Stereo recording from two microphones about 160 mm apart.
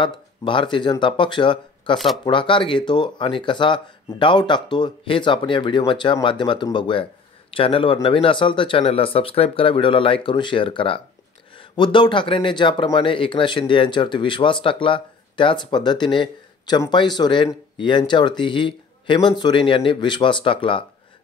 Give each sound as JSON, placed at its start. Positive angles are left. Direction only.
{"t": 0.0, "sound": "speech", "side_deg": 30}